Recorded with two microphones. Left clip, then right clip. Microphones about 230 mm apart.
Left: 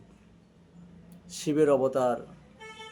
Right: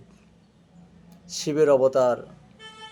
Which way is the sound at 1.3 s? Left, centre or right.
Centre.